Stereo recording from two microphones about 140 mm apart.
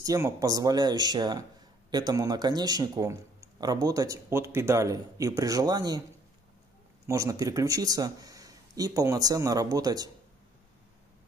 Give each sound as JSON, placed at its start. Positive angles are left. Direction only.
{"t": 0.0, "sound": "speech", "side_deg": -25}
{"t": 7.1, "sound": "speech", "side_deg": -25}